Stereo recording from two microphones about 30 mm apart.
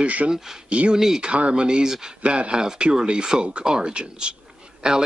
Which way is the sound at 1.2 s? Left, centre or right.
Right.